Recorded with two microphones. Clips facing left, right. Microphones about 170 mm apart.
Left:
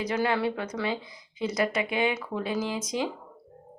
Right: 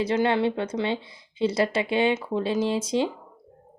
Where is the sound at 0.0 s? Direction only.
25° right (ahead or behind).